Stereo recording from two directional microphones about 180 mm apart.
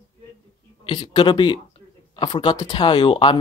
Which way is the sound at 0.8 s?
25° left (ahead or behind).